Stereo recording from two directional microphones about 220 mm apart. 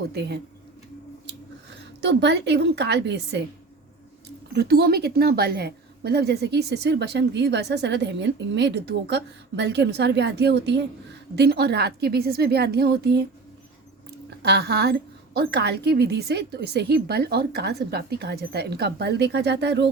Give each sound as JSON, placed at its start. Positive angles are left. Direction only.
{"t": 0.1, "sound": "a woman's voice", "side_deg": -50}
{"t": 1.8, "sound": "a woman's voice", "side_deg": -50}
{"t": 4.5, "sound": "a woman's voice", "side_deg": -45}
{"t": 14.4, "sound": "a woman's voice", "side_deg": -50}